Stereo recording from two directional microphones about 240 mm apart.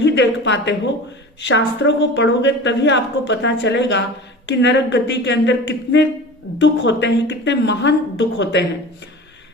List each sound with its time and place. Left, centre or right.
0.0 s a woman's voice: left